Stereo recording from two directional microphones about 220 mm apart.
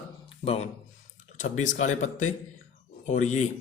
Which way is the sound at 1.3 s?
35° left (ahead or behind).